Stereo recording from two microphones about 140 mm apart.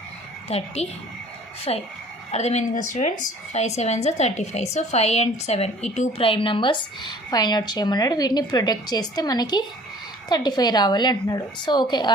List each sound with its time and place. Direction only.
0.4 s a woman's voice: 50° left (ahead or behind); by 12.1 s 30° left (ahead or behind)